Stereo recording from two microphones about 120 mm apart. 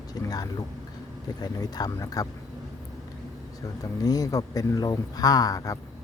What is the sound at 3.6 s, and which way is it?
Speech, 30° left (ahead or behind).